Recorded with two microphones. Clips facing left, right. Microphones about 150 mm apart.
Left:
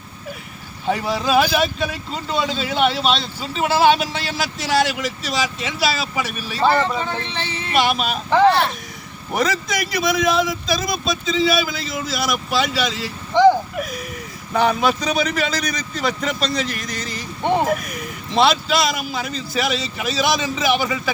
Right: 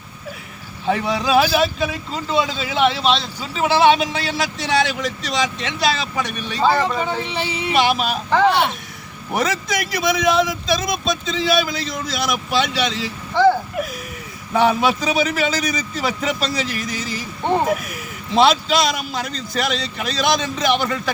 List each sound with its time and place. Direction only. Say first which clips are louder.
0.9 s speech: right 1 dB; centre (ahead or behind)
6.7 s speech: even; 15° right (ahead or behind)
7.7 s speech: right 1 dB; centre (ahead or behind)
9.3 s speech: even; centre (ahead or behind)
13.3 s vehicle: left 2 dB; 15° left (ahead or behind)
13.7 s a sound: right 1 dB; centre (ahead or behind)
14.5 s speech: right 1 dB; centre (ahead or behind)
17.4 s speech: even; 20° left (ahead or behind)
17.7 s speech: even; centre (ahead or behind)